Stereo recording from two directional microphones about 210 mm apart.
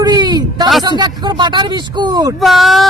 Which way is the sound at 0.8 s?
20° right (ahead or behind).